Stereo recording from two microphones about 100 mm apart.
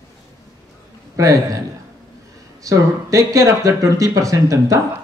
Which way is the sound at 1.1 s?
35° right (ahead or behind).